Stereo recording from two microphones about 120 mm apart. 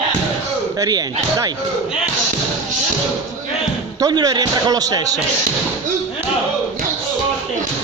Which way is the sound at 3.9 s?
35° right (ahead or behind).